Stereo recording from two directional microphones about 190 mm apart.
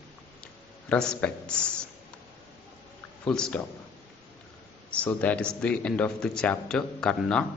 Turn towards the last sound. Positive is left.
turn(degrees=5)  # may be behind; listen again after turning